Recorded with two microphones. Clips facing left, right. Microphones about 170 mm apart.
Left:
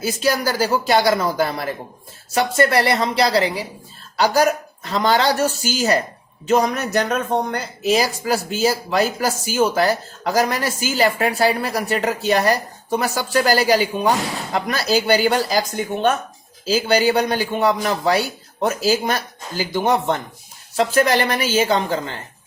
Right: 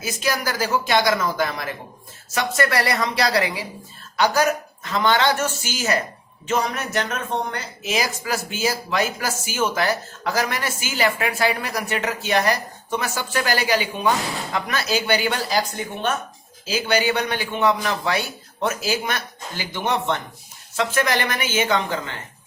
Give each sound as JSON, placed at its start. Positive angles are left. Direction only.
{"t": 0.0, "sound": "a woman's voice", "side_deg": 30}
{"t": 16.6, "sound": "speech", "side_deg": 35}